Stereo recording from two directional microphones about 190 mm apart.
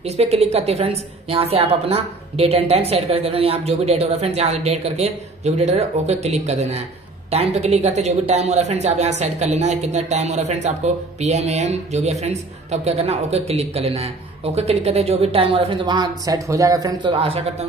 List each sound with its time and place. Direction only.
0.2 s a woman's voice: 35° right (ahead or behind)